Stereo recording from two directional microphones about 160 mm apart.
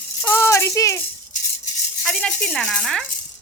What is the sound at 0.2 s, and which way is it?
Rattle, 15° left (ahead or behind).